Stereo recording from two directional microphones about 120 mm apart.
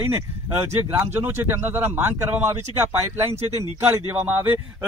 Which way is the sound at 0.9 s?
20° right (ahead or behind).